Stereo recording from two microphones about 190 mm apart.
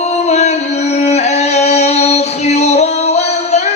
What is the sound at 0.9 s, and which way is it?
Singing, 35° left (ahead or behind).